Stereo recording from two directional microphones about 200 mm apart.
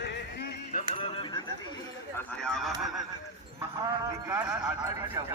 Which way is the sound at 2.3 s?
5° left (ahead or behind).